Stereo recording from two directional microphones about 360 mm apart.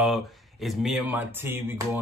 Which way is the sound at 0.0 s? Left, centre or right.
Centre.